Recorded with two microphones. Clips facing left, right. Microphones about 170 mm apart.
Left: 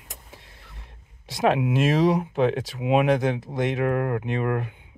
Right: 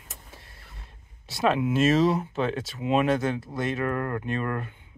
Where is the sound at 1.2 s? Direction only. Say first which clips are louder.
Left 2 dB; 15° left (ahead or behind).